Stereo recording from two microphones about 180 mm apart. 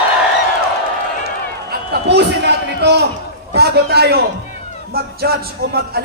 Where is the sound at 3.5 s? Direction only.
65° right (ahead or behind).